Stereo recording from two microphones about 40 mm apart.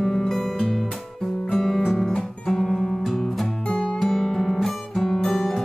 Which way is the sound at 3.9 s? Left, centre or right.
Centre.